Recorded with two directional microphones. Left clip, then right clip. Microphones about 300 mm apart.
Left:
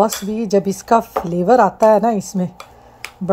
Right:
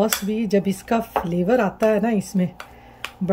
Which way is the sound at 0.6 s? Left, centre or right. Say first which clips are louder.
Left 8 dB; left.